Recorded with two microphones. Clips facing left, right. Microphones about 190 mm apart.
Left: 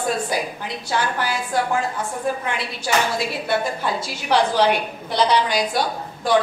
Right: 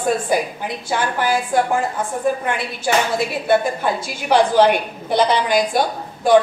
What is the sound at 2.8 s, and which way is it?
A woman's voice, 50° right (ahead or behind).